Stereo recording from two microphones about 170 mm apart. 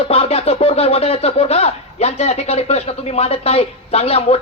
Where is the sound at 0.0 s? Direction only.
35° left (ahead or behind).